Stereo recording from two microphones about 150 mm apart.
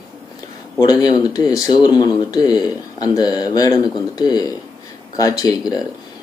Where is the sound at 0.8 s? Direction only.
25° left (ahead or behind).